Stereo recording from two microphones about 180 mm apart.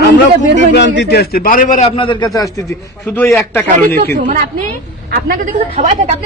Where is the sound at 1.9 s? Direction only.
25° left (ahead or behind).